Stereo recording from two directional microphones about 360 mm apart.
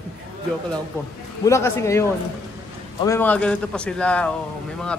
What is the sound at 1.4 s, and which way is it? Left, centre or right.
Speech, centre.